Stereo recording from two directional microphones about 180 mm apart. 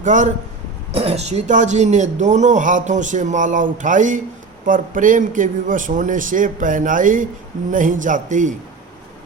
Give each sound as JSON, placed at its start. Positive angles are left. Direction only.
{"t": 0.0, "sound": "speech", "side_deg": -40}